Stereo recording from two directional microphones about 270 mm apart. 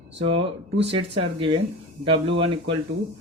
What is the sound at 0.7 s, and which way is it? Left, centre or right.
Speech, right.